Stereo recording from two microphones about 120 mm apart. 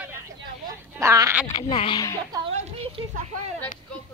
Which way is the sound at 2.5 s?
65° right (ahead or behind).